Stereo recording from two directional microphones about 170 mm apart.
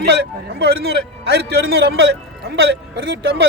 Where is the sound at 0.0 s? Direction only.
80° right.